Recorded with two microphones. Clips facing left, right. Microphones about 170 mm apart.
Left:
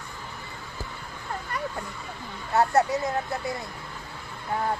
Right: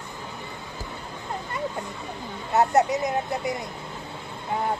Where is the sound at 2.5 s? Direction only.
20° right (ahead or behind).